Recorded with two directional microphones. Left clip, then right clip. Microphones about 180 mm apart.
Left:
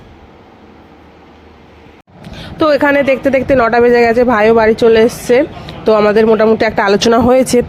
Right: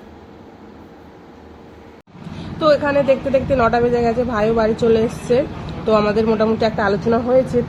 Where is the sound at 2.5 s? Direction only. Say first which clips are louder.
Left 5 dB; 45° left (ahead or behind).